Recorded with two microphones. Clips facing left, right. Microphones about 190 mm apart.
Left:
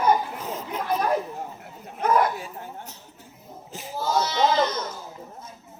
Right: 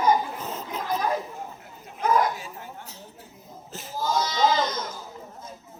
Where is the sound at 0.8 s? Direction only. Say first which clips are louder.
Left 2 dB; 60° left (ahead or behind).